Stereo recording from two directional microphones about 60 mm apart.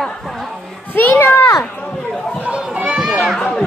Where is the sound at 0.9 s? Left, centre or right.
Left.